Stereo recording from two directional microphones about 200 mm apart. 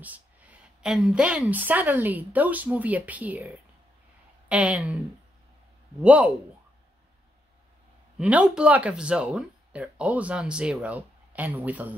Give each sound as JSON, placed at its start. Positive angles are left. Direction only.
{"t": 0.0, "sound": "a woman's voice", "side_deg": -10}
{"t": 5.9, "sound": "a woman's voice", "side_deg": -5}
{"t": 8.2, "sound": "speech", "side_deg": -5}